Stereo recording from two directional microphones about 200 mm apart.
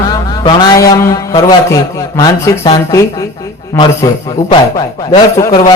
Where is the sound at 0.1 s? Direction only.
20° left (ahead or behind).